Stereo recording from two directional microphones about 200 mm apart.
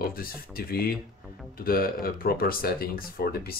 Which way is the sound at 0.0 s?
45° left (ahead or behind).